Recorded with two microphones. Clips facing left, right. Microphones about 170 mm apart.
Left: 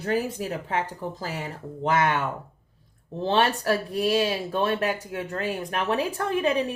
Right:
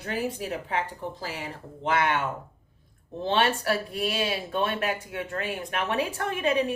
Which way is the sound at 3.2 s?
40° left (ahead or behind).